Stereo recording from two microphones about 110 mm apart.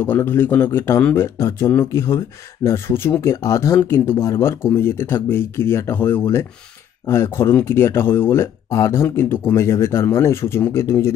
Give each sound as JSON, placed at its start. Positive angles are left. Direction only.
{"t": 0.0, "sound": "speech", "side_deg": 20}